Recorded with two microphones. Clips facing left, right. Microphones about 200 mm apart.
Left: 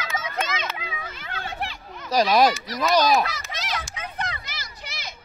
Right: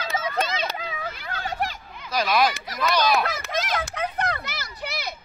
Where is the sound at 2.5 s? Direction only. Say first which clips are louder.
Left 4 dB; 50° right (ahead or behind).